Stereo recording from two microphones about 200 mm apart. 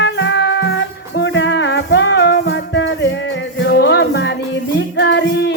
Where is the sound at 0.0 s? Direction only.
65° left (ahead or behind).